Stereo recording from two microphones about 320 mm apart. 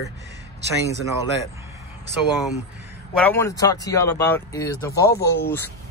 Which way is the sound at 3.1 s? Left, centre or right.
Centre.